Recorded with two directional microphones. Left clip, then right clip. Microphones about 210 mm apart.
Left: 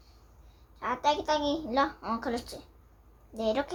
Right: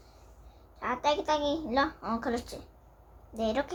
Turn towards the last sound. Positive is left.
turn(degrees=-10)  # may be behind; listen again after turning